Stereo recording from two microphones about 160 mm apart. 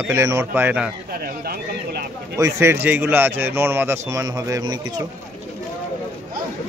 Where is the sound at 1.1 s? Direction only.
70° right (ahead or behind).